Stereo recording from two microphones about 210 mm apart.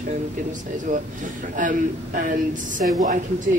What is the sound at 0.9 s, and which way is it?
A man's voice, 40° right (ahead or behind).